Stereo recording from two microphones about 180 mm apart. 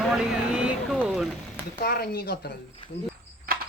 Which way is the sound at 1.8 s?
60° left (ahead or behind).